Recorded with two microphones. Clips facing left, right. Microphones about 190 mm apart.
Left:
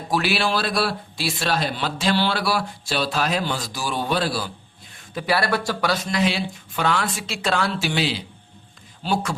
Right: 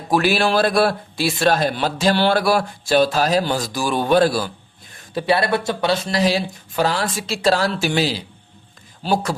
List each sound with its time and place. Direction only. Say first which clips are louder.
0.1 s speech: right 5 dB; 45° right (ahead or behind)
5.1 s speech: right 4 dB; 25° right (ahead or behind)